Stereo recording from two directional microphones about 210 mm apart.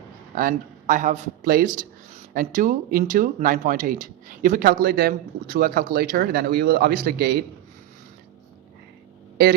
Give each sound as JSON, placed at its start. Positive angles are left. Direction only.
{"t": 0.3, "sound": "speech", "side_deg": -40}